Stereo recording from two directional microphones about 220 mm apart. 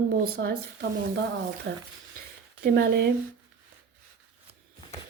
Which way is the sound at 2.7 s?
45° right (ahead or behind).